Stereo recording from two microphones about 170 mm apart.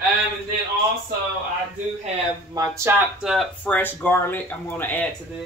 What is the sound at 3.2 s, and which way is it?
Speech, centre (ahead or behind).